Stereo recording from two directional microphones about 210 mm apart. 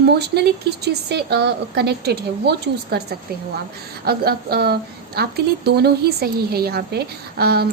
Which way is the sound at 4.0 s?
50° right (ahead or behind).